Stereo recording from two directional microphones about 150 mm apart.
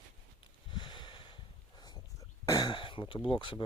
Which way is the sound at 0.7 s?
35° left (ahead or behind).